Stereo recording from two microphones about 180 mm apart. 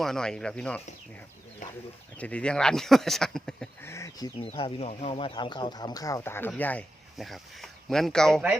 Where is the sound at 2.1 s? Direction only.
5° left (ahead or behind).